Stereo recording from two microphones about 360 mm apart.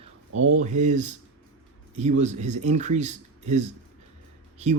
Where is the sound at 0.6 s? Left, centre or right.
Centre.